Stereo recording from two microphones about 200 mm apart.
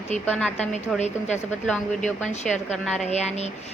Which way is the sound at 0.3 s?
5° left (ahead or behind).